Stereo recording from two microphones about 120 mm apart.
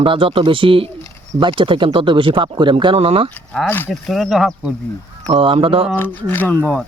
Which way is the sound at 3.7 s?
15° left (ahead or behind).